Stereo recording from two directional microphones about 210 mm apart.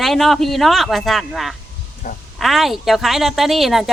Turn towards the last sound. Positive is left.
turn(degrees=0)  # may be behind; listen again after turning